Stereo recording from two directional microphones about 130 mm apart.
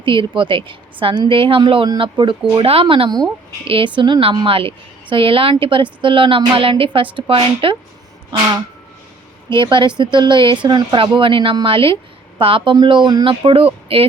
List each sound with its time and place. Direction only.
0.0 s a woman's voice: 40° right (ahead or behind)
9.5 s a woman's voice: 40° right (ahead or behind)